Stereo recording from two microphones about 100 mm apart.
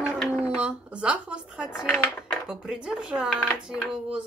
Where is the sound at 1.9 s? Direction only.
10° left (ahead or behind).